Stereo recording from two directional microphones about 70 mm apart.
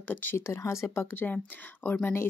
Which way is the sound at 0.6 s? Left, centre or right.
Left.